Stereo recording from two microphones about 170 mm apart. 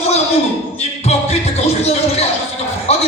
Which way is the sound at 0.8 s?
40° left (ahead or behind).